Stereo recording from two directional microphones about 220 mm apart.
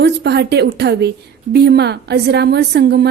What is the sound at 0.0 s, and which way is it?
A woman's voice, 50° right (ahead or behind).